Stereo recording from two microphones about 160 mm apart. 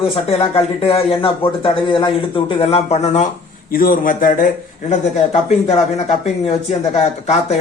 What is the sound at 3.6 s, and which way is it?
Speech, 65° left (ahead or behind).